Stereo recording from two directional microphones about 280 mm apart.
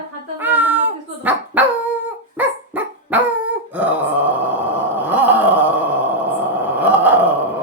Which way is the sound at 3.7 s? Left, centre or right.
Centre.